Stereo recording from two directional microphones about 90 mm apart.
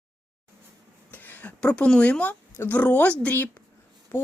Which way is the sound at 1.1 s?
20° left (ahead or behind).